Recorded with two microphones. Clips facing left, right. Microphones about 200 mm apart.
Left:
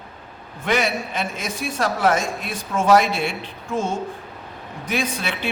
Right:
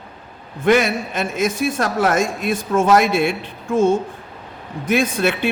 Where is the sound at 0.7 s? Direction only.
50° right (ahead or behind).